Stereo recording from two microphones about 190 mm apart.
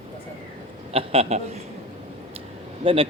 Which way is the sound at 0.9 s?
30° right (ahead or behind).